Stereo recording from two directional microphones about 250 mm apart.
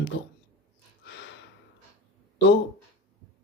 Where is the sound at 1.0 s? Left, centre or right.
Left.